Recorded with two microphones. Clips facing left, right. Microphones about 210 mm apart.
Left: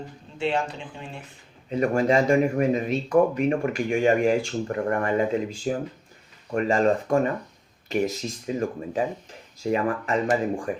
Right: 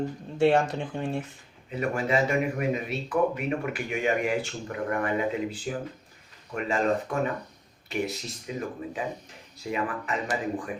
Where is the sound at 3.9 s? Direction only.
40° left (ahead or behind).